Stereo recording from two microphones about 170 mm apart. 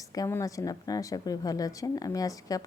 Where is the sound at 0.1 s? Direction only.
20° left (ahead or behind).